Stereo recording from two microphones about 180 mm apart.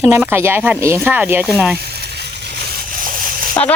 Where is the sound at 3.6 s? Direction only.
25° left (ahead or behind).